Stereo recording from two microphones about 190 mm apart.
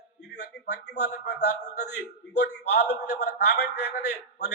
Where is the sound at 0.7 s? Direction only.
60° left (ahead or behind).